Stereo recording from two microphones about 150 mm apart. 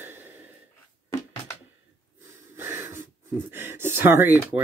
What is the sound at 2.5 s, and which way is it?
Wheeze, 15° right (ahead or behind).